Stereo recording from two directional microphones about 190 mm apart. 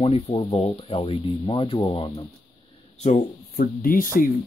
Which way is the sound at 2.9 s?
40° left (ahead or behind).